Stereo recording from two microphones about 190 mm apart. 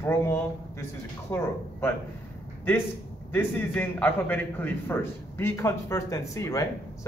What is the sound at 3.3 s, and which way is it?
A man's voice, 10° left (ahead or behind).